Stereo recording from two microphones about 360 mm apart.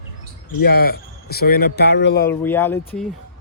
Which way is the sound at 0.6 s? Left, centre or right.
Left.